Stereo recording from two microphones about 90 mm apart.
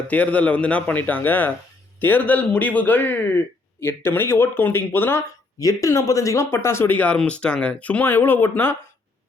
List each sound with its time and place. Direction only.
0.1 s a man's voice: 15° left (ahead or behind)
5.5 s speech: 40° left (ahead or behind)